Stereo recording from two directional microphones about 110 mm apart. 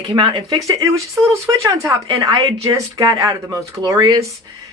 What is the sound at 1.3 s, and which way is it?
Speech, 30° right (ahead or behind).